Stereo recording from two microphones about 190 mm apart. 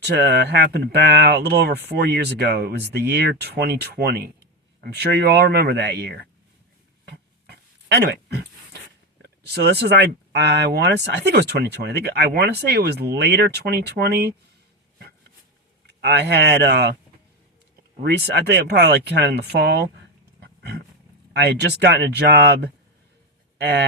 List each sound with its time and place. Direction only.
0.0 s speech: 60° right (ahead or behind)
7.0 s dog: 60° right (ahead or behind)
9.2 s speech: 55° right (ahead or behind)
15.9 s speech: 65° right (ahead or behind)
18.0 s speech: 60° right (ahead or behind)
20.4 s roaring cats: 60° right (ahead or behind)
21.3 s speech: 60° right (ahead or behind)